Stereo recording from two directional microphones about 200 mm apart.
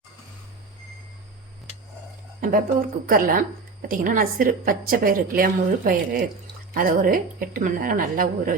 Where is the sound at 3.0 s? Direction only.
45° right (ahead or behind).